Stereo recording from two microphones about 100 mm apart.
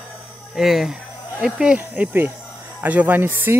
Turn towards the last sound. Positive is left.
turn(degrees=-20)  # may be behind; listen again after turning